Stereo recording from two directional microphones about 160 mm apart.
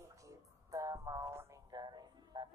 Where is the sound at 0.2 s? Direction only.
20° right (ahead or behind).